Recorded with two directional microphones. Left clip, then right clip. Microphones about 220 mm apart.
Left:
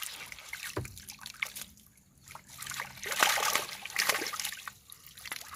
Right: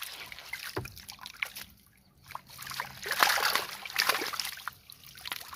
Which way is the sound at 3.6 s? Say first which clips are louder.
Right 2 dB; 15° right (ahead or behind).